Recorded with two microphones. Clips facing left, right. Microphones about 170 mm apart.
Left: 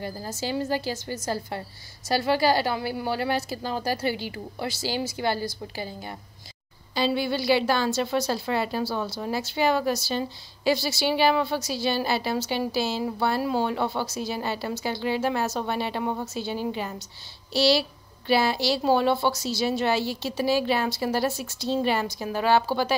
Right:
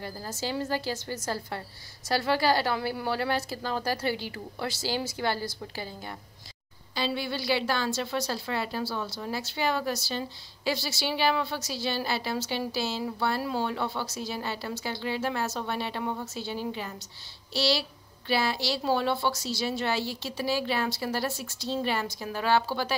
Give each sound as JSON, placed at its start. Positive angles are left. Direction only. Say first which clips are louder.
{"t": 0.0, "sound": "a woman's voice", "louder": "left 3 dB", "side_deg": 20}
{"t": 7.0, "sound": "a woman's voice", "louder": "left 6 dB", "side_deg": 15}